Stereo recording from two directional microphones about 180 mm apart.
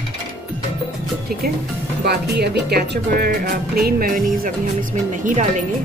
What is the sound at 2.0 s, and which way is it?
Speech, 60° right (ahead or behind).